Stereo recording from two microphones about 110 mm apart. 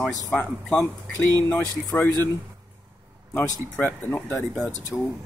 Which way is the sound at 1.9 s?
15° left (ahead or behind).